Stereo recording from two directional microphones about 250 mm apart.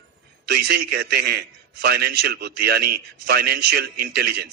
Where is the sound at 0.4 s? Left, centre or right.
Right.